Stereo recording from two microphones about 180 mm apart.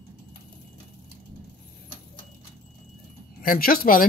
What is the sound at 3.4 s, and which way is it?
Speech, 50° left (ahead or behind).